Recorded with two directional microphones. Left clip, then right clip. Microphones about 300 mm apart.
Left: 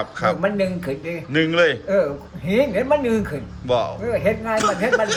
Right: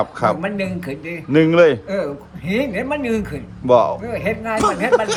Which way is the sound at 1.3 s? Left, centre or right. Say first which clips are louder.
Right 5 dB; centre.